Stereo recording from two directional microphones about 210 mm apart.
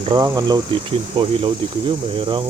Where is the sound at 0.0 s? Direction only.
25° right (ahead or behind).